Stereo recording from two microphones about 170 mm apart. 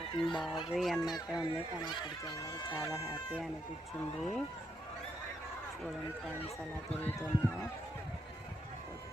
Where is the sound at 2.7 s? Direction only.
20° left (ahead or behind).